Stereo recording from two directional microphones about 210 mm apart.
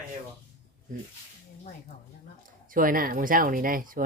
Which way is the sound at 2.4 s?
40° right (ahead or behind).